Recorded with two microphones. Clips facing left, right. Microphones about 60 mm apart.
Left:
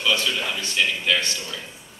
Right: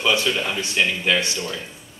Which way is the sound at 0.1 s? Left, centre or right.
Centre.